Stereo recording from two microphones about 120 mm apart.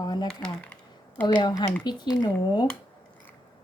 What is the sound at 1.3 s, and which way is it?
Speech, 35° left (ahead or behind).